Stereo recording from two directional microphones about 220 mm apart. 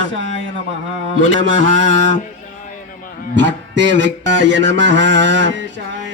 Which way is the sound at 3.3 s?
55° right (ahead or behind).